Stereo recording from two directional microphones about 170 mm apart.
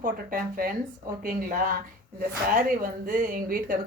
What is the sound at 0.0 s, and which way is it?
Speech, 55° right (ahead or behind).